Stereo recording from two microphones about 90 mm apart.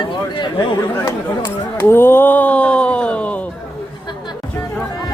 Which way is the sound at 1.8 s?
25° left (ahead or behind).